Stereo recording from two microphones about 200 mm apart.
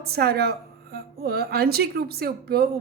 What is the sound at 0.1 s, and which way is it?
Speech, 50° right (ahead or behind).